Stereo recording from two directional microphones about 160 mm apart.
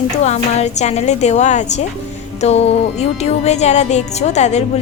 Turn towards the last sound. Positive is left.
turn(degrees=45)  # may be behind; listen again after turning